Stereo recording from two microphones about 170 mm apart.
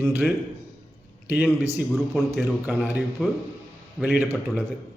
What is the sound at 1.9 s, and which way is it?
Speech, centre (ahead or behind).